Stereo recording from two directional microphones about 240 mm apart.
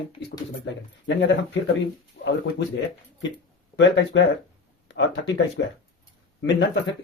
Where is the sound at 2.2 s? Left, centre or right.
Left.